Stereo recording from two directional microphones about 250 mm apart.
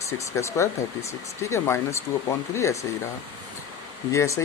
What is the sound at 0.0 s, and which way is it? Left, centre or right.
Speech, centre.